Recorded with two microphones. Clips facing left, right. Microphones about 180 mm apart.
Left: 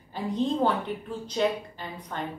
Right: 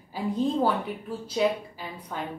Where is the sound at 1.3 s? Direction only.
5° right (ahead or behind).